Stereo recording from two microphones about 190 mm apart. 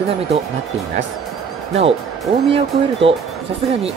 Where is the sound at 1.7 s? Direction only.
30° right (ahead or behind).